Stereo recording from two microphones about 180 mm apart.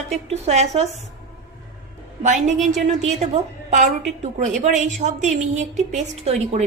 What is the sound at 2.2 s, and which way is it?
A woman's voice, 40° right (ahead or behind).